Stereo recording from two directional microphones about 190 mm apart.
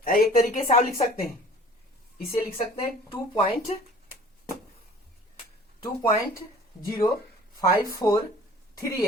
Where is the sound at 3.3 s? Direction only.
30° left (ahead or behind).